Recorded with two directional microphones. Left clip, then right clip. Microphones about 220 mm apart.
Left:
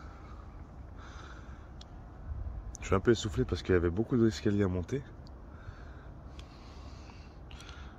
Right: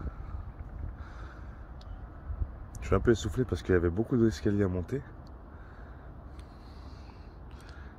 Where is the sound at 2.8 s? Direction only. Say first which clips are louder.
Right 1 dB; centre (ahead or behind).